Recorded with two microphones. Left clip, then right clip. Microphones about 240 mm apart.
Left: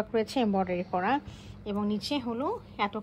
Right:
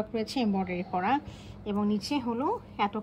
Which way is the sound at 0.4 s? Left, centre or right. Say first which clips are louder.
Left 3 dB; centre.